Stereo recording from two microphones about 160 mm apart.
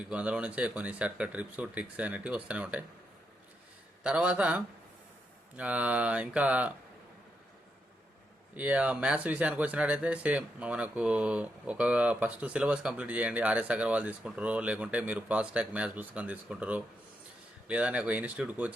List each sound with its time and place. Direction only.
0.1 s speech: 5° right (ahead or behind)
4.0 s speech: 5° right (ahead or behind)
8.5 s speech: 10° right (ahead or behind)